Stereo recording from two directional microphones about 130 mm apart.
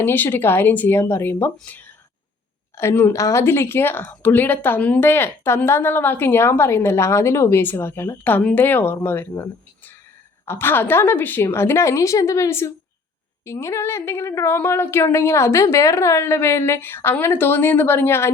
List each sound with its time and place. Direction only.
0.0 s speech: 15° left (ahead or behind)